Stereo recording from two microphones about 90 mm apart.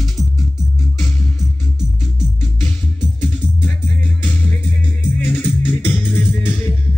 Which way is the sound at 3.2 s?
15° left (ahead or behind).